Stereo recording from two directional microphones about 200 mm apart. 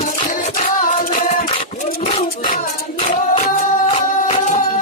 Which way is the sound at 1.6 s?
30° left (ahead or behind).